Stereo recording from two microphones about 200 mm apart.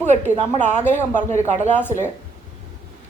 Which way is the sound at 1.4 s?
35° right (ahead or behind).